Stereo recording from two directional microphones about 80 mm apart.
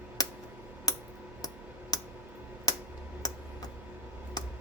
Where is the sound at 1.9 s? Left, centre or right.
Left.